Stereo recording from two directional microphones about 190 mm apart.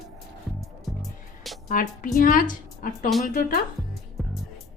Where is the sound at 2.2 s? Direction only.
45° left (ahead or behind).